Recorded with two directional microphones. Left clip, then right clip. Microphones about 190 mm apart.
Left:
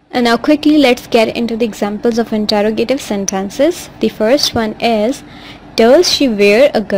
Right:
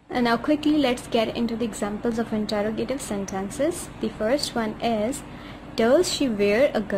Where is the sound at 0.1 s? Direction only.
35° left (ahead or behind).